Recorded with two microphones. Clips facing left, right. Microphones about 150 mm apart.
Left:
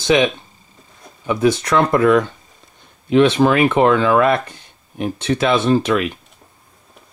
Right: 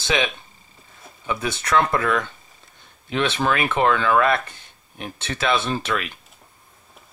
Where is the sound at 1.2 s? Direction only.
25° left (ahead or behind).